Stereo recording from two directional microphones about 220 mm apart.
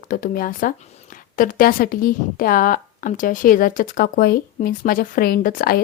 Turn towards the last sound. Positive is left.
turn(degrees=40)  # may be behind; listen again after turning